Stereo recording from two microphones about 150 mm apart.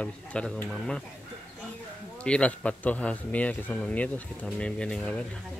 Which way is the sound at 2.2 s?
5° left (ahead or behind).